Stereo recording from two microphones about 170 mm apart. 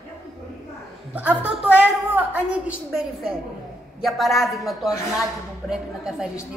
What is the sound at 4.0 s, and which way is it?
A woman's voice, centre (ahead or behind).